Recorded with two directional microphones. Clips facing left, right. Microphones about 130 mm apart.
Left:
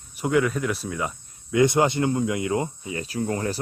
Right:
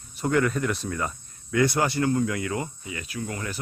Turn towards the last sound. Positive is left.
turn(degrees=35)  # may be behind; listen again after turning